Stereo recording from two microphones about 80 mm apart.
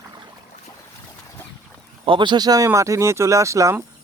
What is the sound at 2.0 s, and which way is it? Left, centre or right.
Speech, right.